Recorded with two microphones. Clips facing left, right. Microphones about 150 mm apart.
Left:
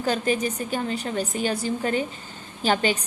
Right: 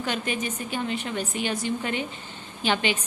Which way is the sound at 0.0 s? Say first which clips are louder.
Left 5 dB; 35° left (ahead or behind).